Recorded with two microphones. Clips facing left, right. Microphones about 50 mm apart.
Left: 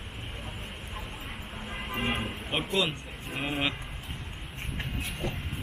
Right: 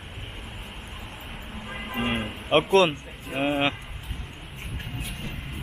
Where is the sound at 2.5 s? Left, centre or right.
Right.